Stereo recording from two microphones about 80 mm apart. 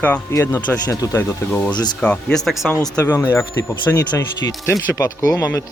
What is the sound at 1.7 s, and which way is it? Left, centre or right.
Speech, left.